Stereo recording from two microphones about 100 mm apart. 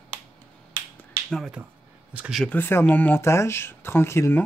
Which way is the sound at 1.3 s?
5° right (ahead or behind).